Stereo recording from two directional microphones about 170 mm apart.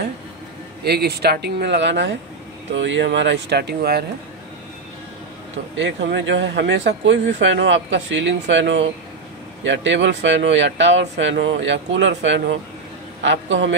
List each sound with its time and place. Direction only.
0.8 s speech: 70° right (ahead or behind)
5.8 s speech: 90° right